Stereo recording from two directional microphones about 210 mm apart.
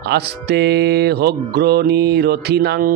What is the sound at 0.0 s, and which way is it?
Speech, 50° right (ahead or behind).